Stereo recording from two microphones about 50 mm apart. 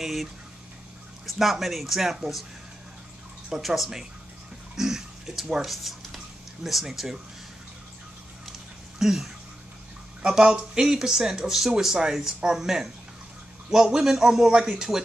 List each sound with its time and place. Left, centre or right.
0.0 s speech: centre
3.4 s speech: centre
4.7 s a sound: centre
9.0 s speech: centre
10.2 s speech: centre